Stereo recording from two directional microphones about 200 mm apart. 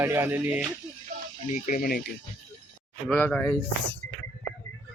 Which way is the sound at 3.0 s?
5° left (ahead or behind).